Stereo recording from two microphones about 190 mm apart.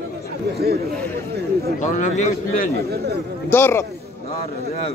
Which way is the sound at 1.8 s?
40° left (ahead or behind).